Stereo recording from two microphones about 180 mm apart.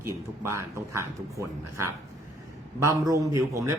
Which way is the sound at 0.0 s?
15° right (ahead or behind).